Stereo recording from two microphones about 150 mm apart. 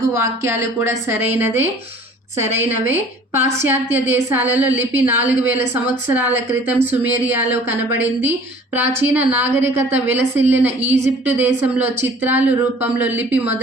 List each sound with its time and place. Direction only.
0.1 s a woman's voice: 20° right (ahead or behind)